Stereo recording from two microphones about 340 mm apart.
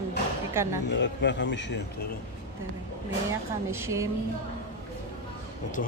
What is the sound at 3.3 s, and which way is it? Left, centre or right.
Speech, centre.